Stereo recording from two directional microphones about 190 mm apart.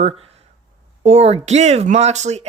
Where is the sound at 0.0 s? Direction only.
30° right (ahead or behind).